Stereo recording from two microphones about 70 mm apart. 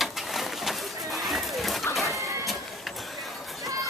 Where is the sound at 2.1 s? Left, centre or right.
Right.